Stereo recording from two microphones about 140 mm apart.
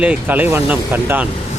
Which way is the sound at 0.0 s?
10° right (ahead or behind).